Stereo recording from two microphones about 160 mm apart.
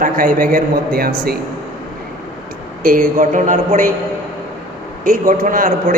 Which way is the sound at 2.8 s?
60° right (ahead or behind).